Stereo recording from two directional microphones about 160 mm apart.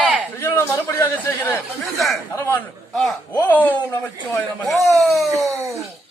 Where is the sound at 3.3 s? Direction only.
10° left (ahead or behind).